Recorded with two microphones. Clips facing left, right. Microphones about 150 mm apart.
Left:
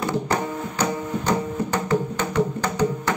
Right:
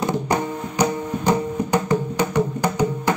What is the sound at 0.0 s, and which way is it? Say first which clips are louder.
Music: right 2 dB; 15° right (ahead or behind).